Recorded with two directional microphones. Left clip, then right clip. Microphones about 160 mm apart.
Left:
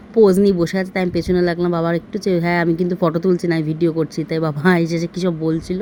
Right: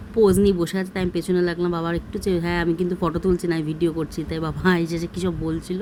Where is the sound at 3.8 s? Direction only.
10° left (ahead or behind).